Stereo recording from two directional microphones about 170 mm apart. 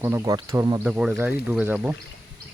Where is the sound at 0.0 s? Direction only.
15° right (ahead or behind).